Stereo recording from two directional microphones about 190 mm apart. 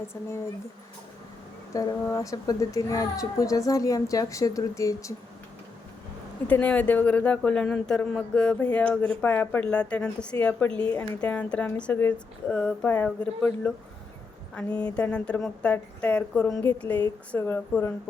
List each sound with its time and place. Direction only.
0.1 s speech: 15° left (ahead or behind)
1.7 s speech: 15° left (ahead or behind)
6.5 s speech: 5° left (ahead or behind)